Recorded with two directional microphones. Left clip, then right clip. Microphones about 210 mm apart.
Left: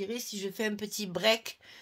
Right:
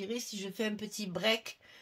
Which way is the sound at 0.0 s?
35° left (ahead or behind).